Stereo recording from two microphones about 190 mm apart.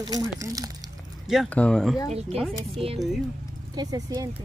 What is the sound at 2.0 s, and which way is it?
Speech, 35° right (ahead or behind).